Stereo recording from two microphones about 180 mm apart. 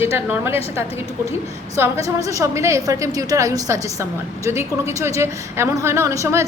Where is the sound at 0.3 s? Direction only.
15° right (ahead or behind).